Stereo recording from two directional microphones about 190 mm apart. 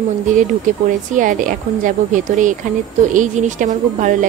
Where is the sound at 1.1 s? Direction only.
45° right (ahead or behind).